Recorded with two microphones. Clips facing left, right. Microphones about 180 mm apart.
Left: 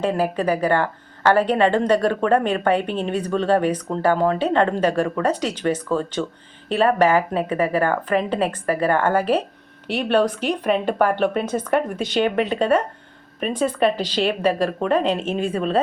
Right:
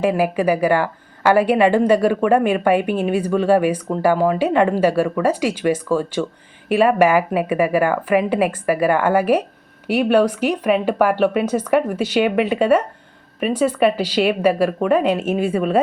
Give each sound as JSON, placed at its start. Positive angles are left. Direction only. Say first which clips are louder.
{"t": 0.0, "sound": "a woman's voice", "louder": "right 3 dB", "side_deg": -10}